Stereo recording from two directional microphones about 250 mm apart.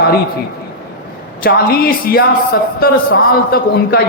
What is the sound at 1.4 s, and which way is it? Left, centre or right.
A man's voice, left.